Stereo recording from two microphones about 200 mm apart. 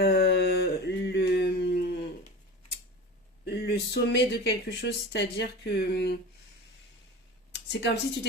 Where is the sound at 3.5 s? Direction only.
50° left (ahead or behind).